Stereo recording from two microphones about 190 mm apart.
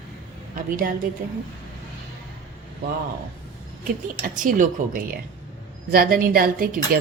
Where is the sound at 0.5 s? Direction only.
50° right (ahead or behind).